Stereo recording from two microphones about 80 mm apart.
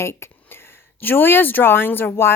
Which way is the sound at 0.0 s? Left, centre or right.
Left.